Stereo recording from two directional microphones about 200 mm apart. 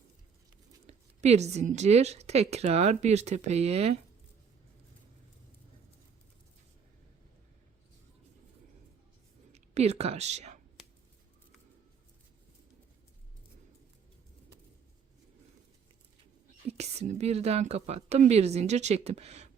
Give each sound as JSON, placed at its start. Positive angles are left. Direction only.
{"t": 0.9, "sound": "a woman's voice", "side_deg": -35}
{"t": 9.5, "sound": "speech", "side_deg": -30}
{"t": 16.6, "sound": "a woman's voice", "side_deg": -30}